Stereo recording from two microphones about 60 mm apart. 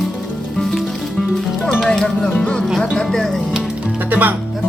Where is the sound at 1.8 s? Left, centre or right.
Centre.